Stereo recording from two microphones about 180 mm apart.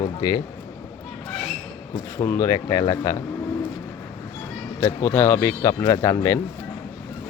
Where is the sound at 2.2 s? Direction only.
15° left (ahead or behind).